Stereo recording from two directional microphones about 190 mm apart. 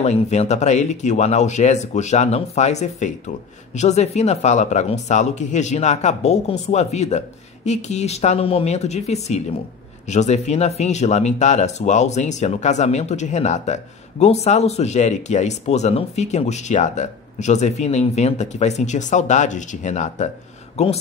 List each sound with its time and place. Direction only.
0.0 s speech: 35° left (ahead or behind)